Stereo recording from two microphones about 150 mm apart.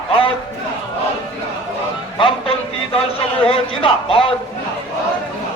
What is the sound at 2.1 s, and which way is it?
A man's voice, 35° left (ahead or behind).